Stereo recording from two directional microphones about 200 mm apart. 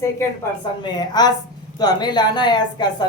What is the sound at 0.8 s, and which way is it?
Speech, 20° left (ahead or behind).